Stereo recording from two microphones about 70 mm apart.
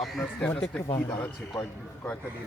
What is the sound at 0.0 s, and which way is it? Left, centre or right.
Speech, centre.